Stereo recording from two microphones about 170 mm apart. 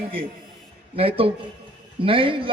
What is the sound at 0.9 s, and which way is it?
A man's voice, 35° right (ahead or behind).